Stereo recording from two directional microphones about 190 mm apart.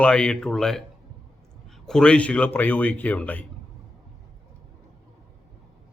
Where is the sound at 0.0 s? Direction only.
5° left (ahead or behind).